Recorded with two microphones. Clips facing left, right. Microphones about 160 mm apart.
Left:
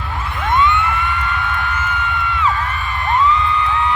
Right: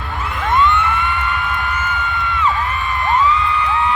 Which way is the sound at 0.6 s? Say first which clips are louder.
Right 1 dB; centre (ahead or behind).